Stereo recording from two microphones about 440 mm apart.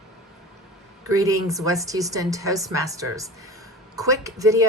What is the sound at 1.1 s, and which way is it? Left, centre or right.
A woman's voice, centre.